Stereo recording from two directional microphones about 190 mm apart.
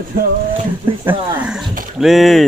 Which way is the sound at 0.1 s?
50° right (ahead or behind).